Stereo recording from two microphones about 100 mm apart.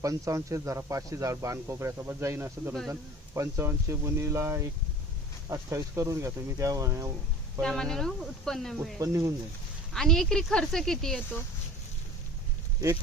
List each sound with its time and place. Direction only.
0.0 s speech: 30° right (ahead or behind)
7.6 s speech: 5° left (ahead or behind)
9.0 s speech: 30° right (ahead or behind)
9.9 s speech: 5° left (ahead or behind)